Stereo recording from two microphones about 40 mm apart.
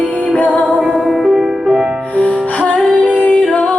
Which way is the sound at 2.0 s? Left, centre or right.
Left.